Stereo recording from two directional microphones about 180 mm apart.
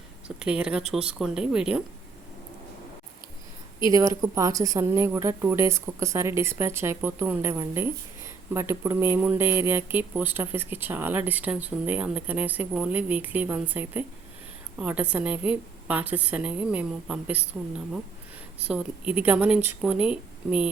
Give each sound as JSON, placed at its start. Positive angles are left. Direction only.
{"t": 0.3, "sound": "speech", "side_deg": -5}
{"t": 3.9, "sound": "speech", "side_deg": -20}